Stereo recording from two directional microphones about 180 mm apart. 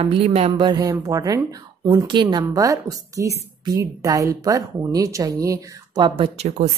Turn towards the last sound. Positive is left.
turn(degrees=-35)  # may be behind; listen again after turning